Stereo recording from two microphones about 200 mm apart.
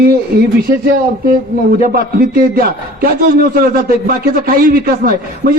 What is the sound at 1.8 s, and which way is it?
A man's voice, 45° right (ahead or behind).